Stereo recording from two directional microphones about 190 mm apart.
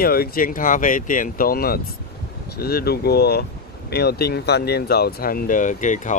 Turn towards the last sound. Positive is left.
turn(degrees=40)  # may be behind; listen again after turning